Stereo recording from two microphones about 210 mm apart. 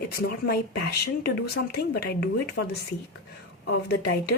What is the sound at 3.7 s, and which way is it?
Speech, 50° left (ahead or behind).